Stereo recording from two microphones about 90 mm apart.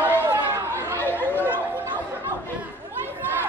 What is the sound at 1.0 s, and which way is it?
Chatter, 25° left (ahead or behind).